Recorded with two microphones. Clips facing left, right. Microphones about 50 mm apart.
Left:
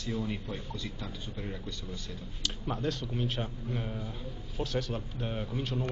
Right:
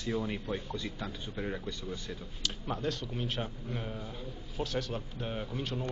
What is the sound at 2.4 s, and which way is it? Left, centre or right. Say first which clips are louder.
A man's voice: left 1 dB; centre.